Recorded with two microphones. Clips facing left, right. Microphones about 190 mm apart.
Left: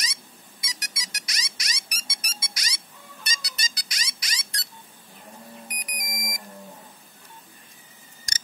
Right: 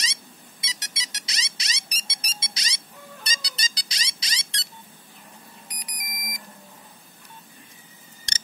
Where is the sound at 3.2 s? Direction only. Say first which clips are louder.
Even; 30° right (ahead or behind).